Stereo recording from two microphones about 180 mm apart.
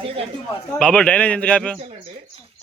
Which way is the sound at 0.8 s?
5° left (ahead or behind).